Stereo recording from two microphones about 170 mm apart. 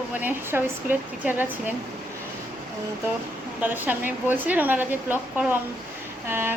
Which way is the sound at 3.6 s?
10° right (ahead or behind).